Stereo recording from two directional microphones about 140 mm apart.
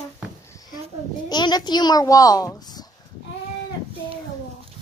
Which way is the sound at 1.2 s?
30° left (ahead or behind).